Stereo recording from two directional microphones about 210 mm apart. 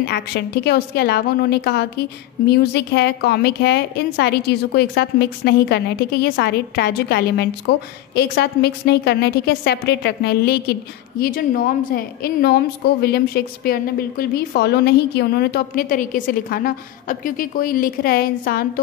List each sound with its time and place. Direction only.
0.0 s a woman's voice: 50° left (ahead or behind)